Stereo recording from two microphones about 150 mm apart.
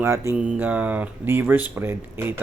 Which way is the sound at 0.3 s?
10° right (ahead or behind).